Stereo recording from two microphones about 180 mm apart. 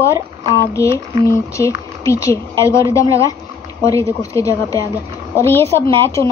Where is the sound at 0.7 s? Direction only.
15° left (ahead or behind).